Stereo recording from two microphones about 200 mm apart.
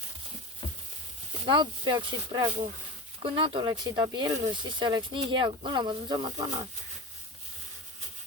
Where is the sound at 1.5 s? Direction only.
25° right (ahead or behind).